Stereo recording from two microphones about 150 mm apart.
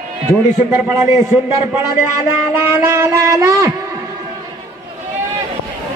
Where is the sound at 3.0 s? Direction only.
20° right (ahead or behind).